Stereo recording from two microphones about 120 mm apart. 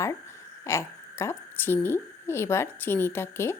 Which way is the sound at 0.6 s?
25° left (ahead or behind).